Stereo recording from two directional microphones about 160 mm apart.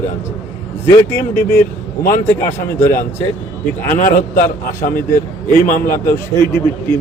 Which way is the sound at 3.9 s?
55° left (ahead or behind).